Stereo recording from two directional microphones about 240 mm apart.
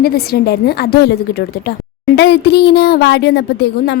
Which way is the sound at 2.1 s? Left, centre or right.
Left.